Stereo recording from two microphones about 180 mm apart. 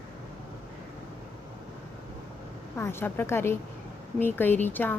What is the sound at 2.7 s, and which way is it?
Speech, 15° left (ahead or behind).